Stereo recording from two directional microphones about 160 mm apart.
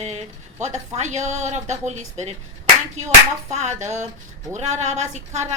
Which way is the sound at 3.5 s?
45° right (ahead or behind).